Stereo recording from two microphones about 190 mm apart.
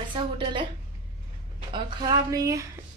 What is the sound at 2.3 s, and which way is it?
Speech, 15° right (ahead or behind).